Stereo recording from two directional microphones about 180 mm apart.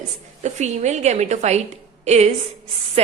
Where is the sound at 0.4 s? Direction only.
40° right (ahead or behind).